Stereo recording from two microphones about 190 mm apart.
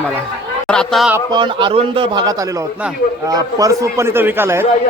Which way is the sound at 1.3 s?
25° right (ahead or behind).